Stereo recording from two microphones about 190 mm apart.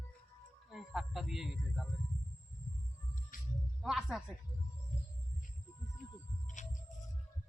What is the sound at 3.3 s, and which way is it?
Music, 45° left (ahead or behind).